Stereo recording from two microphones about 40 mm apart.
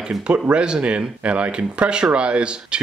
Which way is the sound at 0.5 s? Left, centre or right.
Right.